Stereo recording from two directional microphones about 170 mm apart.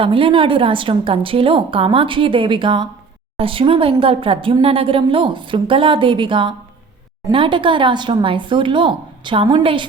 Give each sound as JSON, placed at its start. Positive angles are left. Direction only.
{"t": 0.0, "sound": "speech", "side_deg": -30}